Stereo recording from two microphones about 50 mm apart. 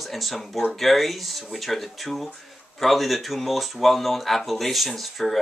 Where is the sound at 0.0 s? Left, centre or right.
Centre.